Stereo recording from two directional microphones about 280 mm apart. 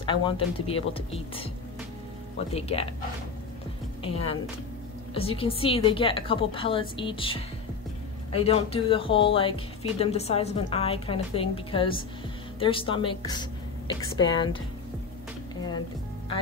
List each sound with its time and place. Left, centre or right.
0.0 s speech: centre
2.3 s a woman's voice: left
5.1 s a woman's voice: centre